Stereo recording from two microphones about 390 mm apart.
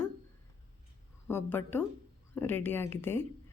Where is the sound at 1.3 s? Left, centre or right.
Centre.